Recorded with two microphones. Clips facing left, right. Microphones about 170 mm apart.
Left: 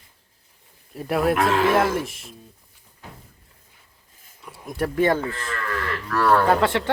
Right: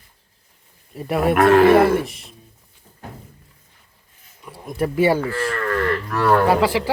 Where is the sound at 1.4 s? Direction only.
60° right (ahead or behind).